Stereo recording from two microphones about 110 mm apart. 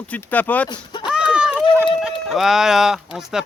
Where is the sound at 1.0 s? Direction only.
10° right (ahead or behind).